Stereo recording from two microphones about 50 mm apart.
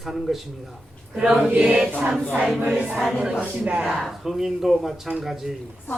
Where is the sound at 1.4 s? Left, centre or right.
Right.